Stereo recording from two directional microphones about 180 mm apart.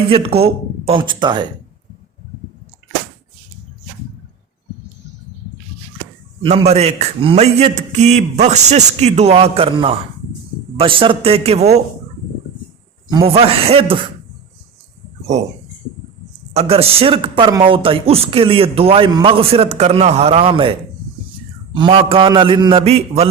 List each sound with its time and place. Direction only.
0.1 s speech: 30° right (ahead or behind)
6.4 s speech: 30° right (ahead or behind)
13.1 s speech: 25° right (ahead or behind)
16.6 s speech: 35° right (ahead or behind)
21.8 s a man's voice: 30° right (ahead or behind)